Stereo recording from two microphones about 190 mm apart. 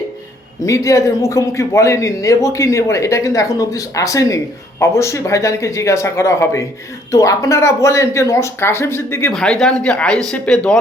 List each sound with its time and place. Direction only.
0.6 s speech: 15° left (ahead or behind)
9.3 s speech: 5° left (ahead or behind)